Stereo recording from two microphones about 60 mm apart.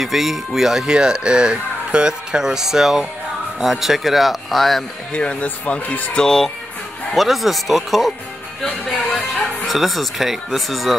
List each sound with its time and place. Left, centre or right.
0.0 s speech: centre
5.1 s speech: centre
6.1 s speech: centre